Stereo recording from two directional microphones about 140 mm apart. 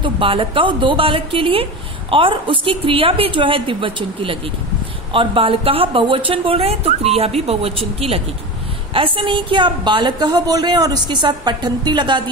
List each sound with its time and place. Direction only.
0.0 s a woman's voice: 40° right (ahead or behind)